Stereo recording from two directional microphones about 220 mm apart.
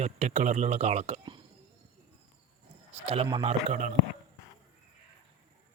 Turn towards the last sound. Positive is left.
turn(degrees=-30)  # may be behind; listen again after turning